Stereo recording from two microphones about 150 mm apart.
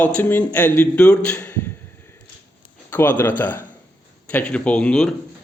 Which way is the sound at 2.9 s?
15° left (ahead or behind).